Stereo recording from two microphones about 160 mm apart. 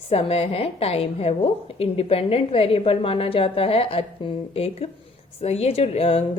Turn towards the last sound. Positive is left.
turn(degrees=40)  # may be behind; listen again after turning